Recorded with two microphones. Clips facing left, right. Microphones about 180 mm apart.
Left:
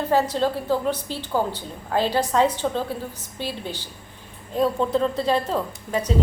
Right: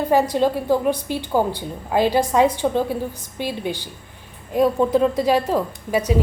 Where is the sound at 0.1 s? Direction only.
15° right (ahead or behind).